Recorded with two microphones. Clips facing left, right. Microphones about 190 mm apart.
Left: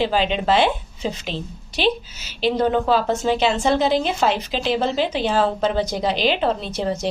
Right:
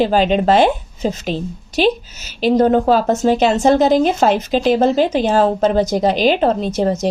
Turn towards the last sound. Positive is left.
turn(degrees=-45)  # may be behind; listen again after turning